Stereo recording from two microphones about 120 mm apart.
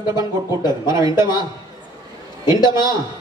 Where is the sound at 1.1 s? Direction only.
35° left (ahead or behind).